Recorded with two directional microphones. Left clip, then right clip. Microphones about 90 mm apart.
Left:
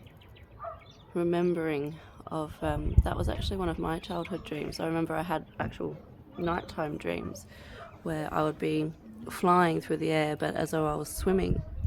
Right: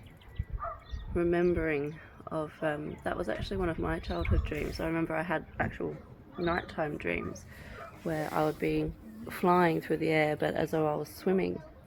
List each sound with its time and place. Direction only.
1.1 s speech: 45° left (ahead or behind); by 10.7 s 30° left (ahead or behind)
10.7 s speech: 50° left (ahead or behind)